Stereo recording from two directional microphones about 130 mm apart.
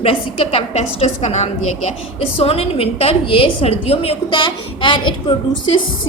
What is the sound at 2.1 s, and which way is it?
A woman's voice, 50° left (ahead or behind).